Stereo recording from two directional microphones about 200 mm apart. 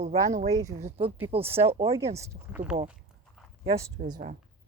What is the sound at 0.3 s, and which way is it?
Speech, 35° right (ahead or behind).